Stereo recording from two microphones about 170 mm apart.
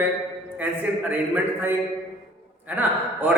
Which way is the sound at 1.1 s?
10° right (ahead or behind).